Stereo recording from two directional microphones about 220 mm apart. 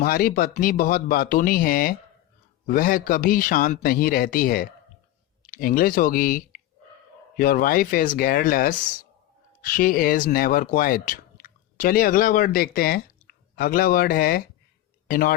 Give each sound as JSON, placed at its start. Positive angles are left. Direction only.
{"t": 0.0, "sound": "speech", "side_deg": 40}